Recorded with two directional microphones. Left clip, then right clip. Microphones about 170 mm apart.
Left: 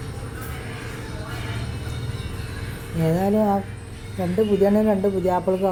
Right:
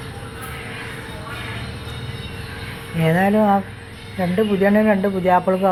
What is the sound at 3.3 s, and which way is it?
Speech, 20° right (ahead or behind).